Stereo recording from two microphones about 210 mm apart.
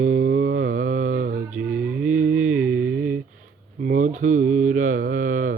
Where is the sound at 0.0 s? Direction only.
45° right (ahead or behind).